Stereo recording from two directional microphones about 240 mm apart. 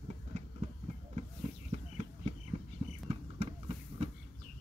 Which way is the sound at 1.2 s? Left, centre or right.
Right.